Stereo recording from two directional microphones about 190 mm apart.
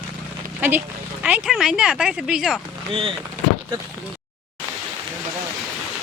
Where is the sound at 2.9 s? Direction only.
30° right (ahead or behind).